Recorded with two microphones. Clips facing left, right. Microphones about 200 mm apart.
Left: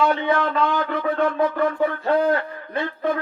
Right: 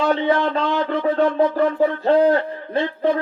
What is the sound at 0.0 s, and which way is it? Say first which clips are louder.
A man's voice: right 2 dB; 30° right (ahead or behind).